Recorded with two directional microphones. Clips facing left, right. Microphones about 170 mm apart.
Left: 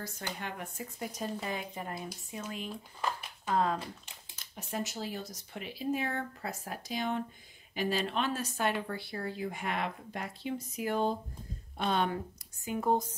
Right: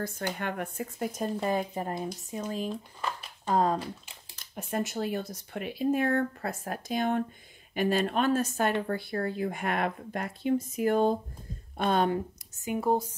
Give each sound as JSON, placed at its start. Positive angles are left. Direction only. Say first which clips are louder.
{"t": 0.0, "sound": "speech", "louder": "right 7 dB", "side_deg": -55}
{"t": 4.6, "sound": "speech", "louder": "right 6 dB", "side_deg": -55}
{"t": 12.1, "sound": "speech", "louder": "right 7 dB", "side_deg": -20}
{"t": 12.8, "sound": "speech", "louder": "right 2 dB", "side_deg": -10}